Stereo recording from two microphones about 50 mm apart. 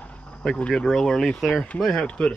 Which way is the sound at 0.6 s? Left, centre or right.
Left.